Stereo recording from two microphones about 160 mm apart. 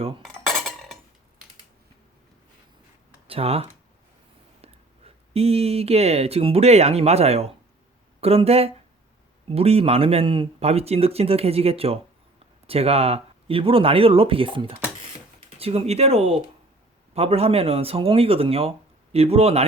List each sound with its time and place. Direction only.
0.4 s cutlery: centre (ahead or behind)
3.2 s speech: 35° right (ahead or behind)